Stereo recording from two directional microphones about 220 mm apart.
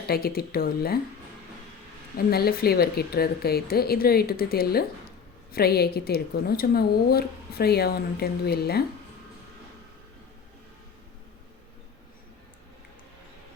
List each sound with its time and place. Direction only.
0.1 s a woman's voice: 45° left (ahead or behind)
2.1 s a woman's voice: 45° left (ahead or behind)